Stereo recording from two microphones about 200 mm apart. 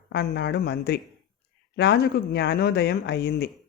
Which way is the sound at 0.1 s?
55° left (ahead or behind).